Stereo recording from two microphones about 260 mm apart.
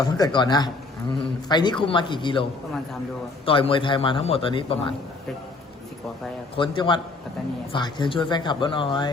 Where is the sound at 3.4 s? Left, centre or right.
Left.